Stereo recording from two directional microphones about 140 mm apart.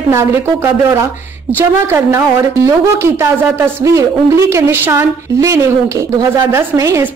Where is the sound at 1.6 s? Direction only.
20° right (ahead or behind).